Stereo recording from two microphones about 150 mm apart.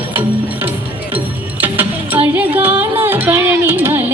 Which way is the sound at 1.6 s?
10° right (ahead or behind).